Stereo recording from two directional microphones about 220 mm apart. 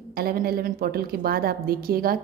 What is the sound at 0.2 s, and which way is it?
A woman's voice, 45° right (ahead or behind).